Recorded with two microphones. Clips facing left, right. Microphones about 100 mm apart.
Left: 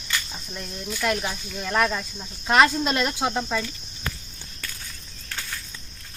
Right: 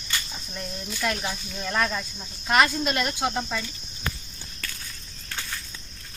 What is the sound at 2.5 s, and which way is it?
Speech, 25° left (ahead or behind).